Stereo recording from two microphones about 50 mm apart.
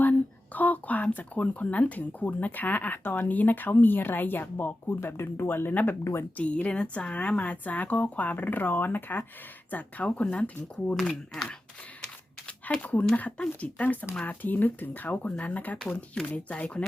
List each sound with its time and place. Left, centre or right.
0.0 s speech: left
5.0 s speech: left
9.7 s speech: left
11.0 s speech: centre
12.8 s speech: left
15.8 s speech: centre